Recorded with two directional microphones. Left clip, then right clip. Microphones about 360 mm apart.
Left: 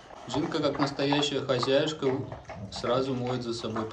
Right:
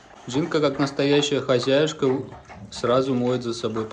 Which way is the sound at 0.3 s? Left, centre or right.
Centre.